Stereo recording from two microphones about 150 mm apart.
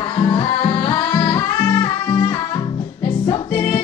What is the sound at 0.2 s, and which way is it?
Music, 35° left (ahead or behind).